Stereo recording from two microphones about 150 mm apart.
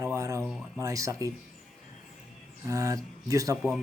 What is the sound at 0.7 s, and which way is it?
Speech, 20° right (ahead or behind).